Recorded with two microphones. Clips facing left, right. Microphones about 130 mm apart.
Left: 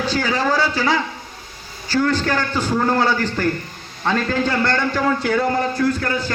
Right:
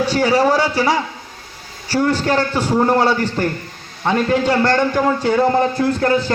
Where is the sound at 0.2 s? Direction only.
25° right (ahead or behind).